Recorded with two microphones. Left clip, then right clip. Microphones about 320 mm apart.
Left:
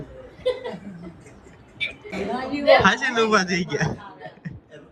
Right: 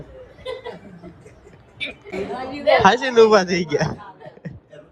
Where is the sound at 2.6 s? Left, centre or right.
Centre.